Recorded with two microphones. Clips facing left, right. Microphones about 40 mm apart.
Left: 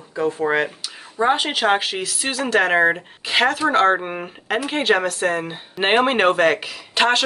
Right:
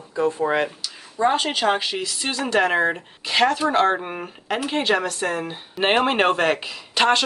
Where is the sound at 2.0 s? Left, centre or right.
Left.